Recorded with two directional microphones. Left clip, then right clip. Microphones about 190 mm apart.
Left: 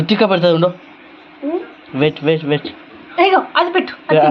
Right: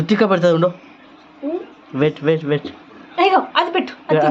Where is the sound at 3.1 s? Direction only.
30° right (ahead or behind).